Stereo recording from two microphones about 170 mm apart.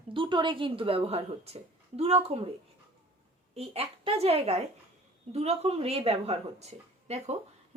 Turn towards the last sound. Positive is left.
turn(degrees=-40)  # may be behind; listen again after turning